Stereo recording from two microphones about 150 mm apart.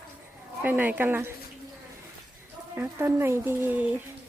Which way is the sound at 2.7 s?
15° right (ahead or behind).